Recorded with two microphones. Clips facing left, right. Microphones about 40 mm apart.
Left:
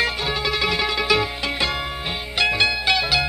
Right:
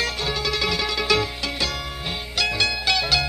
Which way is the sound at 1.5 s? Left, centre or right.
Left.